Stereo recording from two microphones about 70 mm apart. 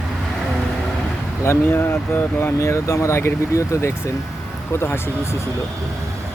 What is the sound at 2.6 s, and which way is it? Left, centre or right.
Speech, left.